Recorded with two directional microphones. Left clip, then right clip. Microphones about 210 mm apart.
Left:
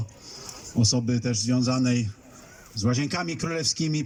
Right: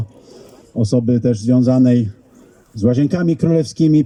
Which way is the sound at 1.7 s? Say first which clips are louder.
Right 11 dB; 45° right (ahead or behind).